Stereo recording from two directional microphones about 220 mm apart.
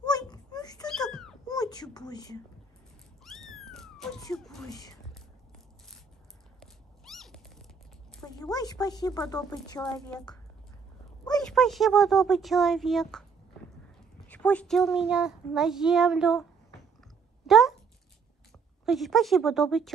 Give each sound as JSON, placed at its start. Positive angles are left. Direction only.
{"t": 0.0, "sound": "a sound", "side_deg": 20}
{"t": 0.8, "sound": "cat", "side_deg": 0}
{"t": 1.5, "sound": "a sound", "side_deg": 20}
{"t": 3.3, "sound": "cat", "side_deg": 0}
{"t": 6.6, "sound": "cat", "side_deg": 0}
{"t": 8.5, "sound": "speech", "side_deg": 15}
{"t": 9.8, "sound": "a child's voice", "side_deg": 5}
{"t": 11.2, "sound": "a child's voice", "side_deg": 5}
{"t": 14.2, "sound": "a child's voice", "side_deg": 5}
{"t": 17.5, "sound": "cat", "side_deg": 0}
{"t": 18.9, "sound": "a child's voice", "side_deg": 0}